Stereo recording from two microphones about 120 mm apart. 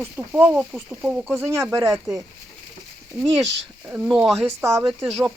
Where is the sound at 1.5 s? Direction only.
25° right (ahead or behind).